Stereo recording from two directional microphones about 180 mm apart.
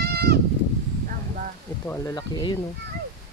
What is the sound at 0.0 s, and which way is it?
Goat, 60° right (ahead or behind).